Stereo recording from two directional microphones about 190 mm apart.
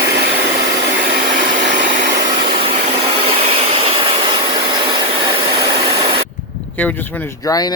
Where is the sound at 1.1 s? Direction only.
45° right (ahead or behind).